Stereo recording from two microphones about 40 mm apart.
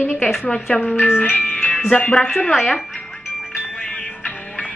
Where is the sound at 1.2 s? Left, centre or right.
Left.